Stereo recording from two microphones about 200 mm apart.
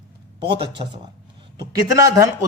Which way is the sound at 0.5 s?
25° right (ahead or behind).